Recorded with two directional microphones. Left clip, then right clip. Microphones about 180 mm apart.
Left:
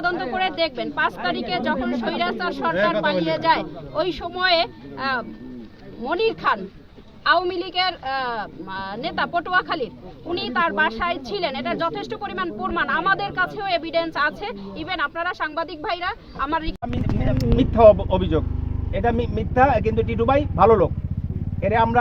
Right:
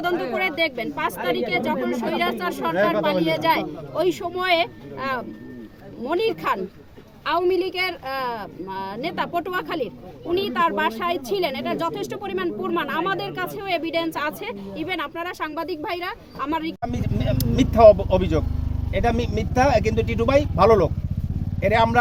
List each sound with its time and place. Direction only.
0.0 s speech: 15° right (ahead or behind)